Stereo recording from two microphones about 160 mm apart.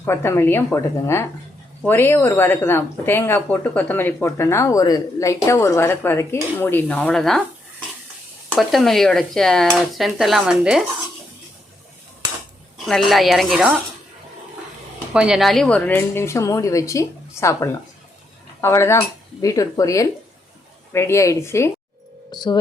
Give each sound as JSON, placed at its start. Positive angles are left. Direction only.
{"t": 0.0, "sound": "speech", "side_deg": 15}
{"t": 8.5, "sound": "speech", "side_deg": 0}
{"t": 12.8, "sound": "speech", "side_deg": 0}
{"t": 15.1, "sound": "speech", "side_deg": -5}
{"t": 22.3, "sound": "speech", "side_deg": 25}